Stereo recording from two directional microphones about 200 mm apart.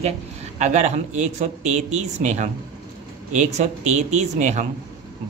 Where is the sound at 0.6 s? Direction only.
35° right (ahead or behind).